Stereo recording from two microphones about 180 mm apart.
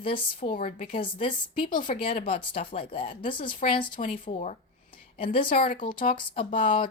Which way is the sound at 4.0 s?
45° left (ahead or behind).